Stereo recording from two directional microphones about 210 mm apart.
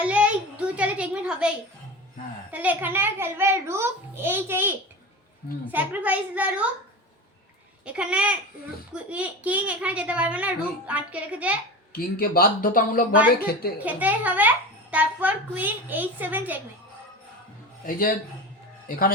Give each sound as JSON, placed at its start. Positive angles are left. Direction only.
{"t": 0.0, "sound": "a sound", "side_deg": -5}
{"t": 2.5, "sound": "a child's voice", "side_deg": -10}
{"t": 7.9, "sound": "a child's voice", "side_deg": -5}
{"t": 11.9, "sound": "speech", "side_deg": 45}
{"t": 13.8, "sound": "a child's voice", "side_deg": -10}